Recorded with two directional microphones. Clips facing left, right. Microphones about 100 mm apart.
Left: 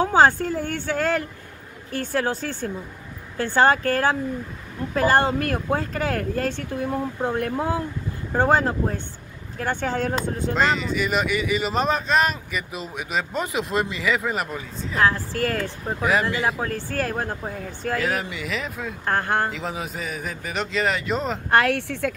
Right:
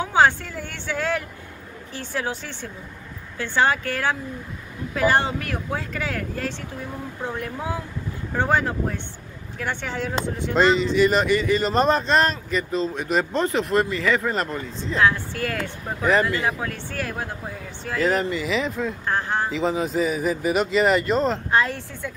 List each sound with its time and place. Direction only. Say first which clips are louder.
0.0 s speech: left 2 dB; 40° left (ahead or behind)
8.3 s speech: left 3 dB; 40° left (ahead or behind)
10.5 s speech: right 5 dB; centre (ahead or behind)
14.0 s speech: right 2 dB; 5° left (ahead or behind)
15.0 s speech: even; 35° left (ahead or behind)
16.0 s speech: right 2 dB; 10° left (ahead or behind)
16.6 s speech: left 3 dB; 40° left (ahead or behind)
18.0 s a man's voice: right 4 dB; 5° left (ahead or behind)
19.0 s speech: left 4 dB; 50° left (ahead or behind)
19.5 s a man's voice: right 7 dB; centre (ahead or behind)
21.5 s speech: left 3 dB; 65° left (ahead or behind); by 22.1 s 80° left